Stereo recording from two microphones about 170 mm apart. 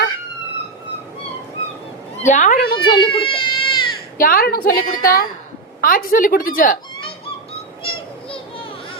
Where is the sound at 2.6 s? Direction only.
65° left (ahead or behind).